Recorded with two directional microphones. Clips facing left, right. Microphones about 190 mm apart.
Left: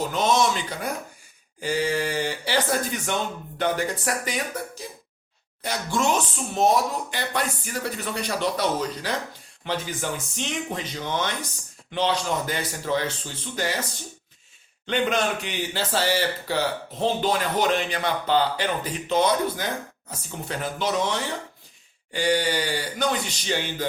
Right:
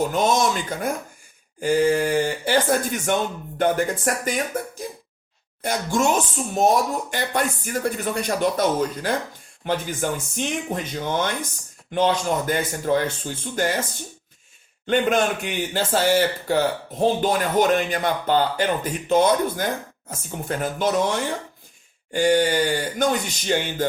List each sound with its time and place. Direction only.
0.0 s speech: 50° right (ahead or behind)
14.8 s speech: 50° right (ahead or behind)